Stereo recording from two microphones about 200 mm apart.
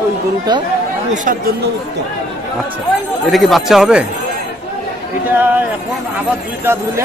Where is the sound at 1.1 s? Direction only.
40° right (ahead or behind).